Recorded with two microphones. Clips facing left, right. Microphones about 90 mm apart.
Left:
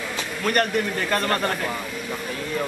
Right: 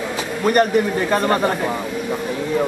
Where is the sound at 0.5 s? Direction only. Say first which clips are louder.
Right 7 dB; 5° right (ahead or behind).